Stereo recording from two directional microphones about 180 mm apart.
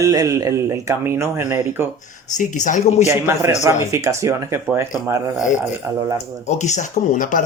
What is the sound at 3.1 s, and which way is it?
Speech, 15° right (ahead or behind).